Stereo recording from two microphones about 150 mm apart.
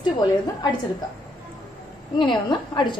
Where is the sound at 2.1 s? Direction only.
30° left (ahead or behind).